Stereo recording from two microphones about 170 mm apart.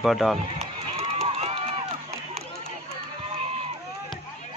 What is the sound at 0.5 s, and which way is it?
Run, 40° right (ahead or behind).